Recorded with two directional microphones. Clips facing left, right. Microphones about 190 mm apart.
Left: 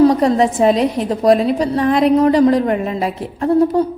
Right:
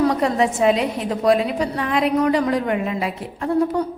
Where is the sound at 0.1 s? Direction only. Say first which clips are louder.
Left 5 dB; 35° left (ahead or behind).